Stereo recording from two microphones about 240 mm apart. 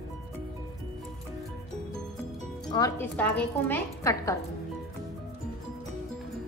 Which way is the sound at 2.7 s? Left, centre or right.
Centre.